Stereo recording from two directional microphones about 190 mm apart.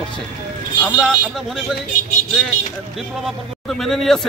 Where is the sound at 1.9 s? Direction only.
45° left (ahead or behind).